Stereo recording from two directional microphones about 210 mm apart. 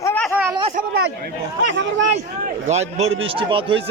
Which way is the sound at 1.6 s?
60° right (ahead or behind).